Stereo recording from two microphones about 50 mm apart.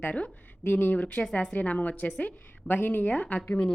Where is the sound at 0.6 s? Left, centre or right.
Left.